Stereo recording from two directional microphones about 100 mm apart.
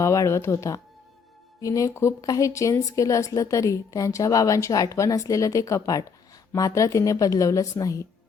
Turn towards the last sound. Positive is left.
turn(degrees=35)  # may be behind; listen again after turning